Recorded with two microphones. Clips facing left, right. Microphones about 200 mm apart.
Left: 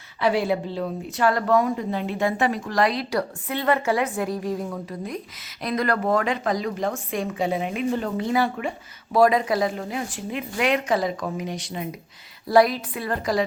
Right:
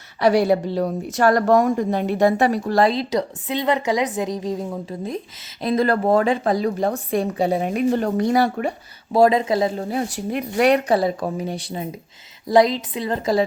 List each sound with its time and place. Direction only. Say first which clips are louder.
0.2 s speech: right 5 dB; 40° right (ahead or behind)
9.1 s speech: right 3 dB; 25° right (ahead or behind)
12.5 s speech: right 2 dB; 20° right (ahead or behind)